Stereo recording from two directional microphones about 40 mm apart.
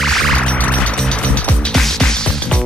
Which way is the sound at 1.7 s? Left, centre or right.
Centre.